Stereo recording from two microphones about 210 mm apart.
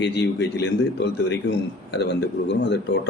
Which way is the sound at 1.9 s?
55° left (ahead or behind).